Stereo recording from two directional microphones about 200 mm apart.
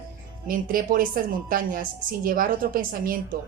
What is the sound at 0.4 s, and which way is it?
Speech, 45° right (ahead or behind).